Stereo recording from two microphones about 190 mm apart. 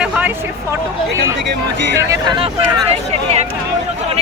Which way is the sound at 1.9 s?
25° right (ahead or behind).